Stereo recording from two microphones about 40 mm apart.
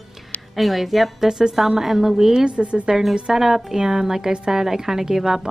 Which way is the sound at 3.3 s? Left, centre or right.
Centre.